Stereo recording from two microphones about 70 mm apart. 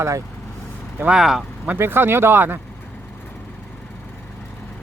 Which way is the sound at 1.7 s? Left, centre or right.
Right.